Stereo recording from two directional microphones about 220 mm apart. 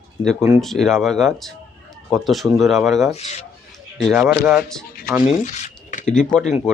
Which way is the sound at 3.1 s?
30° left (ahead or behind).